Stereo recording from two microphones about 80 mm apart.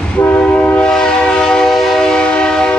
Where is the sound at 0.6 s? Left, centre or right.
Left.